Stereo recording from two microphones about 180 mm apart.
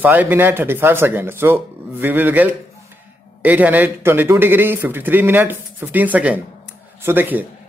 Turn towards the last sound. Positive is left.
turn(degrees=-10)  # may be behind; listen again after turning